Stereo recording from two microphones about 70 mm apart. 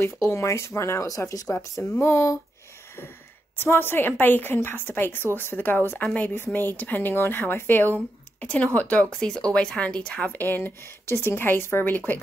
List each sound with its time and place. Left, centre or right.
0.2 s speech: left
1.5 s speech: left
3.5 s a woman's voice: left
10.3 s a woman's voice: left